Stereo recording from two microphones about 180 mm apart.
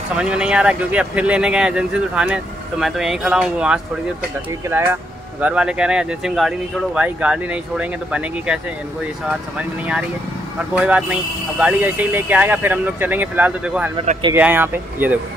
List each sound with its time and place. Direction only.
0.2 s speech: 5° right (ahead or behind)
5.4 s speech: 5° right (ahead or behind)
9.6 s speech: 5° right (ahead or behind)